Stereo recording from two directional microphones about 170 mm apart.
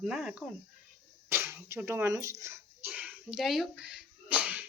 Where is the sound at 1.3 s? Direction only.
15° right (ahead or behind).